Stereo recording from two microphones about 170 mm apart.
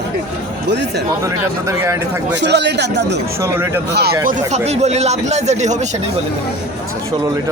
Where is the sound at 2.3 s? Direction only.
90° right.